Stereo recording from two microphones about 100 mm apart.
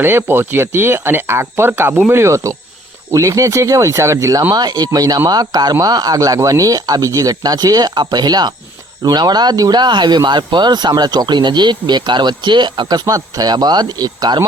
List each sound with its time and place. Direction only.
0.0 s speech: 20° right (ahead or behind); by 13.0 s 50° right (ahead or behind)
13.1 s speech: 35° right (ahead or behind)